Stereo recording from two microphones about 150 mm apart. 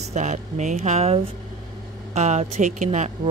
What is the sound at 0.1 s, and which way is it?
Speech, 55° right (ahead or behind).